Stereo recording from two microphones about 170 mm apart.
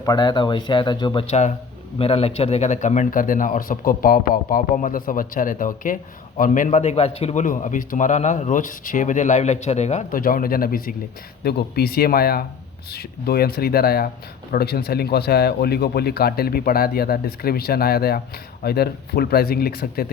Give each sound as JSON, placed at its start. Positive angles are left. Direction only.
{"t": 0.0, "sound": "speech", "side_deg": 20}
{"t": 1.3, "sound": "speech", "side_deg": 40}
{"t": 7.4, "sound": "speech", "side_deg": 50}